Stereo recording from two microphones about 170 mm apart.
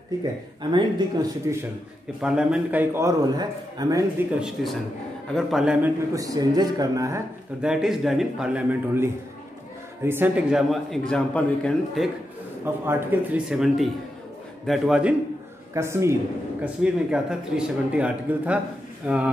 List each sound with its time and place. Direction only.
0.6 s a woman's voice: 25° right (ahead or behind)
2.2 s a man's voice: 5° right (ahead or behind); by 4.3 s 20° right (ahead or behind)
4.4 s a man's voice: 5° right (ahead or behind)
6.1 s a woman's voice: 20° right (ahead or behind)
7.6 s a man's voice: 5° right (ahead or behind)
12.8 s a man's voice: 10° right (ahead or behind)
15.7 s a man's voice: 15° right (ahead or behind)
16.8 s a man's voice: 5° right (ahead or behind)